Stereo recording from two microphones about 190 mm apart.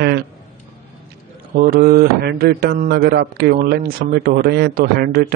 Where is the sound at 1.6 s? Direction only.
50° right (ahead or behind).